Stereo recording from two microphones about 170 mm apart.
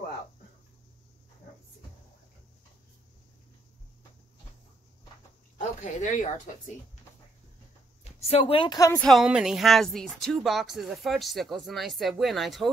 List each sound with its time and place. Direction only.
5.6 s speech: 45° left (ahead or behind)
8.0 s speech: 35° left (ahead or behind); by 9.0 s 20° left (ahead or behind)
9.0 s speech: centre (ahead or behind)